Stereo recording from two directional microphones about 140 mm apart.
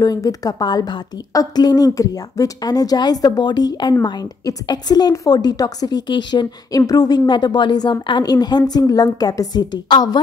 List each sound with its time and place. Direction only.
0.0 s a woman's voice: 25° left (ahead or behind)